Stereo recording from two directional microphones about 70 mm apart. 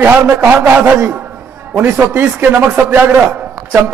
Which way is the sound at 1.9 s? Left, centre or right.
Right.